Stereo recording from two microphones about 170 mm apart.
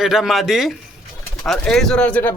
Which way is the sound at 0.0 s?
Centre (ahead or behind).